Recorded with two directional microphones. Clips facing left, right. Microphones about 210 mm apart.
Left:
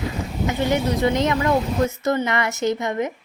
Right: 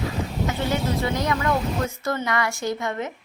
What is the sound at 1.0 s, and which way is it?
A woman's voice, 20° left (ahead or behind).